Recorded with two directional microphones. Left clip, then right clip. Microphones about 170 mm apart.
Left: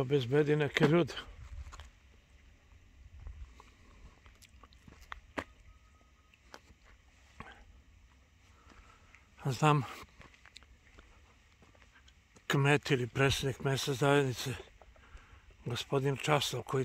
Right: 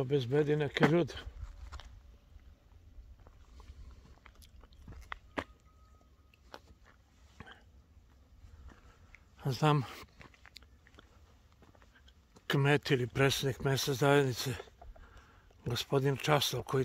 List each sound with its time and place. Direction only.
0.0 s speech: 30° left (ahead or behind)
1.4 s a sound: 10° left (ahead or behind)
4.8 s biting: 10° right (ahead or behind)
7.3 s drip: 25° left (ahead or behind)
9.4 s speech: 20° left (ahead or behind)
10.1 s a sound: 15° right (ahead or behind)
12.4 s speech: 20° left (ahead or behind); by 16.8 s 5° left (ahead or behind)